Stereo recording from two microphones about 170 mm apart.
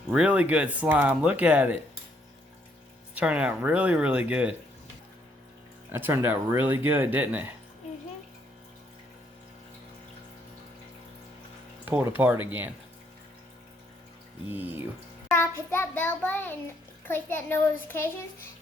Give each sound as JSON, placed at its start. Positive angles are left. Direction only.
{"t": 0.1, "sound": "speech", "side_deg": -5}
{"t": 3.2, "sound": "speech", "side_deg": -5}
{"t": 5.9, "sound": "speech", "side_deg": -15}
{"t": 11.9, "sound": "speech", "side_deg": -10}
{"t": 14.5, "sound": "speech", "side_deg": -10}
{"t": 15.3, "sound": "a child's voice", "side_deg": 15}